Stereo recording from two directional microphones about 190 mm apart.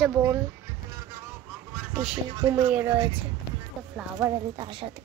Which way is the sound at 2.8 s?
25° right (ahead or behind).